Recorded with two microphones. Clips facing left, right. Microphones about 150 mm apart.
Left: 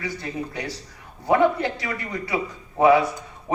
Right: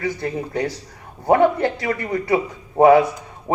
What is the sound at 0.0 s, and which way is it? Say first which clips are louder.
Speech: right 5 dB; 50° right (ahead or behind).